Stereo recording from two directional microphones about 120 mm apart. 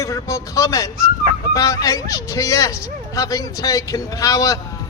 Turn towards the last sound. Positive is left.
turn(degrees=30)  # may be behind; listen again after turning